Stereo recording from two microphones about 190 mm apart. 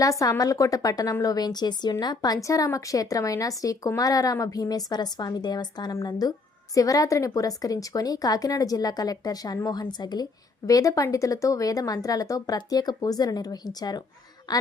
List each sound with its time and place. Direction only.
0.0 s a woman's voice: 15° left (ahead or behind)